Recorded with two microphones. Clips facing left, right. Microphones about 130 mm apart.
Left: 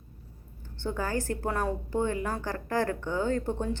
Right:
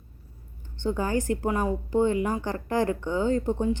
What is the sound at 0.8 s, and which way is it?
A woman's voice, 15° right (ahead or behind).